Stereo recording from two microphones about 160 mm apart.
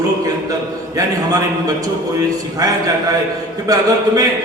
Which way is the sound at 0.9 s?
25° right (ahead or behind).